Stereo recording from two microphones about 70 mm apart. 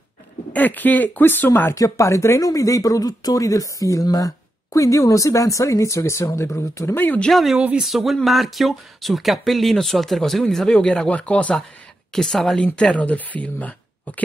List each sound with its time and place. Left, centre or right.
0.5 s speech: left
1.8 s speech: left
7.3 s speech: centre
12.1 s speech: centre